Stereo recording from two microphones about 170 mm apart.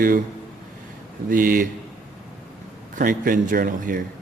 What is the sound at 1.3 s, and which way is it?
Speech, 55° right (ahead or behind).